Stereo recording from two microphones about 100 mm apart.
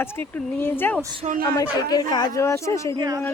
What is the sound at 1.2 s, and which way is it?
Speech, 90° right.